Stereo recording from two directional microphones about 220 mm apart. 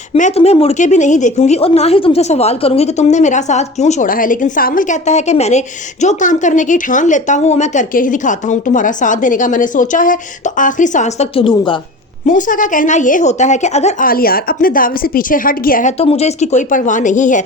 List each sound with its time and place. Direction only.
0.1 s a woman's voice: 30° left (ahead or behind)
12.2 s a woman's voice: 35° left (ahead or behind)